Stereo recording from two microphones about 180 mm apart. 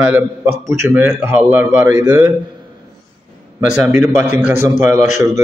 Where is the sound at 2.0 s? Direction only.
20° right (ahead or behind).